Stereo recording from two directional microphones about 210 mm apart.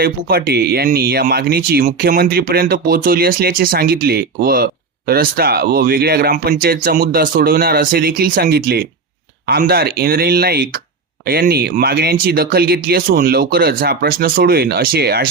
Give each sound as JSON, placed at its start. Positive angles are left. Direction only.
{"t": 0.0, "sound": "speech", "side_deg": -45}